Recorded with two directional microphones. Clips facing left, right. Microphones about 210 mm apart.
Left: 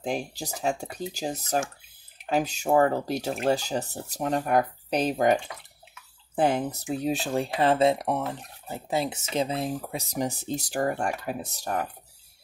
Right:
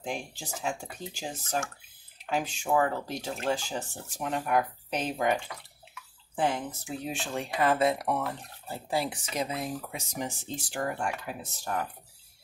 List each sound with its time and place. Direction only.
0.0 s speech: 40° left (ahead or behind)